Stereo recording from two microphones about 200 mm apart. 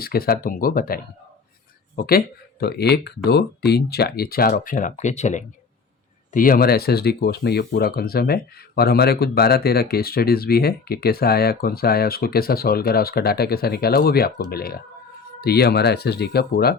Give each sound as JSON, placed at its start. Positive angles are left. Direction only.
{"t": 0.0, "sound": "speech", "side_deg": 50}
{"t": 2.0, "sound": "speech", "side_deg": 50}